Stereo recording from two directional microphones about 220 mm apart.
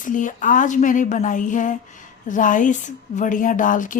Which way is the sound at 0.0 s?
35° left (ahead or behind).